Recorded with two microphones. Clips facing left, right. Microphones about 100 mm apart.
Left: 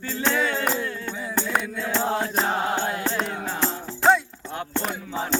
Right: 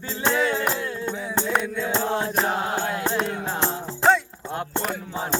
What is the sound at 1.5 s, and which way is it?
Mantra, 5° left (ahead or behind).